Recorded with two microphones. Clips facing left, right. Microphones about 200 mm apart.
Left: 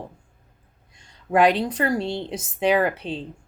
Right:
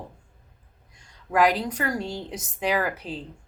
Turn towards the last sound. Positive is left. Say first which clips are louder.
# left 5 dB
turn(degrees=30)  # may be behind; listen again after turning